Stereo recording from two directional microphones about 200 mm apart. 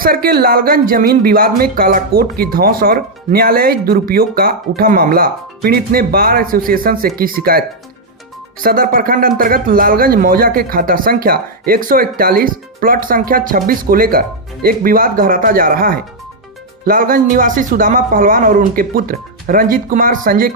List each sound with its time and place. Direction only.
0.0 s speech: 45° right (ahead or behind)
8.6 s speech: 45° right (ahead or behind)